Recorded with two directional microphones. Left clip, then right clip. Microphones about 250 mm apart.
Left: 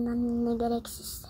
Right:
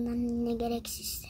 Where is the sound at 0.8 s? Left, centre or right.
Right.